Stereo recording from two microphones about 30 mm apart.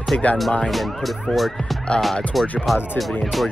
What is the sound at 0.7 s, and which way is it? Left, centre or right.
Speech, centre.